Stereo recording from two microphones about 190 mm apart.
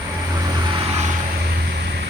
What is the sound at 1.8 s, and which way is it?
Vehicle, 60° right (ahead or behind).